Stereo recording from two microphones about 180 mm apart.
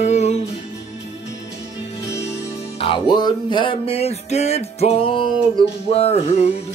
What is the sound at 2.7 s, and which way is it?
Music, 30° left (ahead or behind).